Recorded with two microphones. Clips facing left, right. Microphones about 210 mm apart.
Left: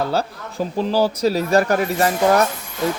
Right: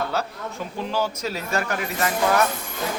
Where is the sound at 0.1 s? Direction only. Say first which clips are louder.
Left 5 dB; 35° left (ahead or behind).